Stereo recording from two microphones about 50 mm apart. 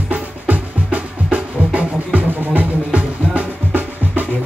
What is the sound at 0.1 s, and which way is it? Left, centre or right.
Music, right.